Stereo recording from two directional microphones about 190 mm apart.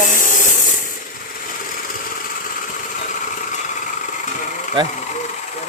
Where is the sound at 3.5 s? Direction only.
40° left (ahead or behind).